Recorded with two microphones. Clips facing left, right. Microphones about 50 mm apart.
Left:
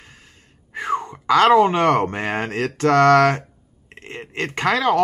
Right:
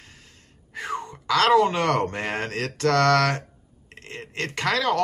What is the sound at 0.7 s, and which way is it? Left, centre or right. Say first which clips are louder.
Speech: left 7 dB; left.